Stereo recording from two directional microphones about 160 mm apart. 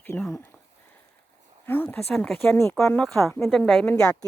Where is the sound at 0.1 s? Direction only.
15° left (ahead or behind).